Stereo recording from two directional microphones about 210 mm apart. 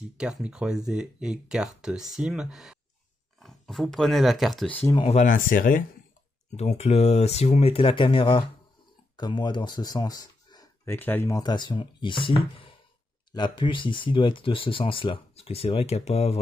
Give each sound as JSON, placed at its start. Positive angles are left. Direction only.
{"t": 0.2, "sound": "speech", "side_deg": -5}
{"t": 4.8, "sound": "speech", "side_deg": 25}
{"t": 5.2, "sound": "speech", "side_deg": 40}